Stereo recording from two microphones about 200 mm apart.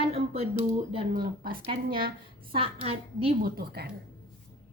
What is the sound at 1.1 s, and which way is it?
Speech, 50° right (ahead or behind).